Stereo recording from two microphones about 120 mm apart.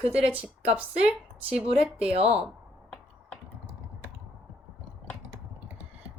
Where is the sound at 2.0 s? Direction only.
55° right (ahead or behind).